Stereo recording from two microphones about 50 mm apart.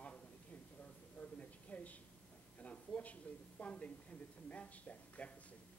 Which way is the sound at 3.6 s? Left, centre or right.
Left.